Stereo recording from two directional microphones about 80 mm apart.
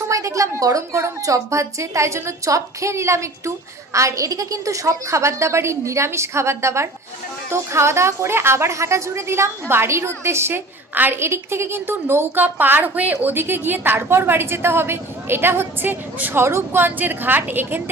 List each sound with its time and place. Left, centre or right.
0.1 s a woman's voice: right